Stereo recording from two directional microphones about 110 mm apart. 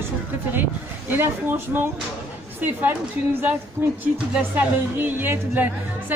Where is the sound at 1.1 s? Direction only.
20° right (ahead or behind).